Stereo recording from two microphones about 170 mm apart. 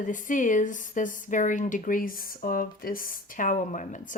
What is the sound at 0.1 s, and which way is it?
Speech, 50° left (ahead or behind).